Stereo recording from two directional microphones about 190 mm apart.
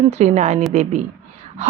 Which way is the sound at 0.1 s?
35° right (ahead or behind).